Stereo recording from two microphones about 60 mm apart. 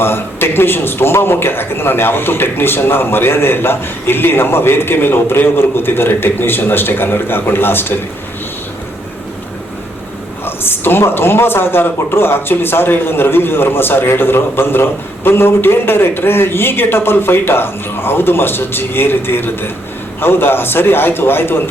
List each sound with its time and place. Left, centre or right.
0.0 s a man's voice: left
10.4 s a man's voice: left